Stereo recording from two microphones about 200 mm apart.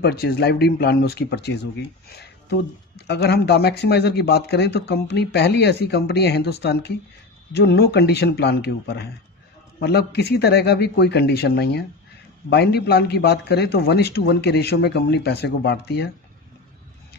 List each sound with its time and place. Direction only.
0.0 s a man's voice: 50° left (ahead or behind)
3.1 s a man's voice: 55° left (ahead or behind)